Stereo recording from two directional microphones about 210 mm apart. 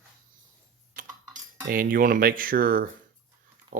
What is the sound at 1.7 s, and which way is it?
Speech, 40° right (ahead or behind).